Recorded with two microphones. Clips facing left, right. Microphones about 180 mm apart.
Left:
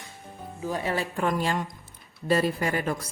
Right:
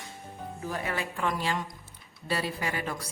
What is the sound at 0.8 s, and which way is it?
A woman's voice, 35° left (ahead or behind).